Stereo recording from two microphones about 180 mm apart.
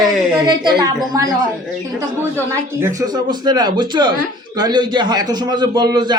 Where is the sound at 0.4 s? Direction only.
25° right (ahead or behind).